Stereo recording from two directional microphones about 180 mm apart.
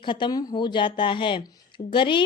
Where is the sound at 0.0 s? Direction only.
25° left (ahead or behind).